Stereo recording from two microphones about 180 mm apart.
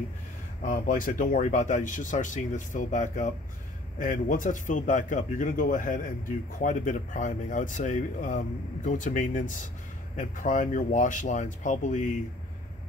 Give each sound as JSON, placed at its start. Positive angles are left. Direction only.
{"t": 0.6, "sound": "speech", "side_deg": 45}